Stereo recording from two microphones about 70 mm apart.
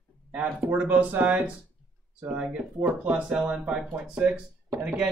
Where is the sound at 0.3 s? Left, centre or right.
Right.